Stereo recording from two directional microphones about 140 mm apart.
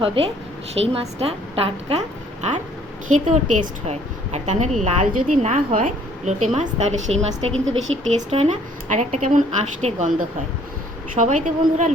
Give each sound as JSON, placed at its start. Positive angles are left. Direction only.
{"t": 0.0, "sound": "a woman's voice", "side_deg": -40}
{"t": 11.1, "sound": "a woman's voice", "side_deg": -65}